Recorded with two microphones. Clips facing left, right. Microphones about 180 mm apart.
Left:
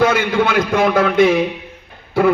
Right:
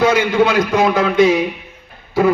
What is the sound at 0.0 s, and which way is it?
A man's voice, 55° left (ahead or behind).